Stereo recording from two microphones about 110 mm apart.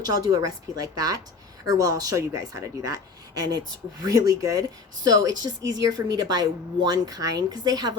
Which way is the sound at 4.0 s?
30° right (ahead or behind).